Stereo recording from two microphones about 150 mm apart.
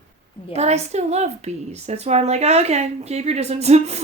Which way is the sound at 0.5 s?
45° right (ahead or behind).